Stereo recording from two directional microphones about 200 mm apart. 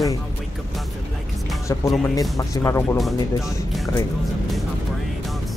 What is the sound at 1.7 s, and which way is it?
Speech, 15° left (ahead or behind).